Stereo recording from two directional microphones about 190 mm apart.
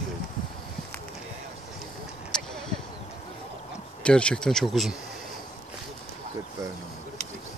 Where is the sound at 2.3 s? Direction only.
5° left (ahead or behind).